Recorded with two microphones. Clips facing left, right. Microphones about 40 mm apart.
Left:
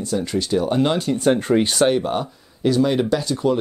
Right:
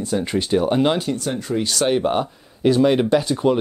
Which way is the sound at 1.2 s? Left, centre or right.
Left.